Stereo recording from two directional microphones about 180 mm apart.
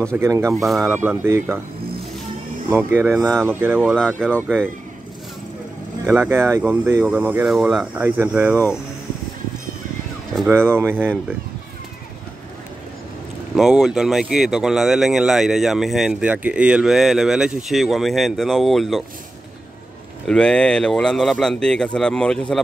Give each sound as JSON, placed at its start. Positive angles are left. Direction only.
{"t": 0.1, "sound": "speech", "side_deg": -15}
{"t": 2.7, "sound": "speech", "side_deg": -10}
{"t": 3.8, "sound": "speech", "side_deg": 5}
{"t": 6.0, "sound": "speech", "side_deg": -15}
{"t": 10.5, "sound": "speech", "side_deg": -15}
{"t": 13.6, "sound": "speech", "side_deg": 0}
{"t": 20.2, "sound": "speech", "side_deg": 5}